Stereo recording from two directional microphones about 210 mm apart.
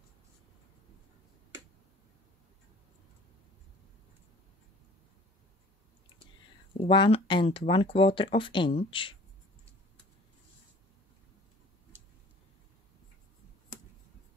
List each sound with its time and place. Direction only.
6.8 s speech: 25° left (ahead or behind)